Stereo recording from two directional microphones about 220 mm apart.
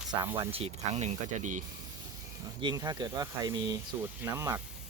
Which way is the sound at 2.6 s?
15° right (ahead or behind).